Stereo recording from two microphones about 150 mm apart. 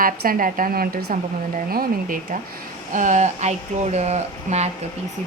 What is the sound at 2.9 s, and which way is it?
A woman's voice, 55° right (ahead or behind).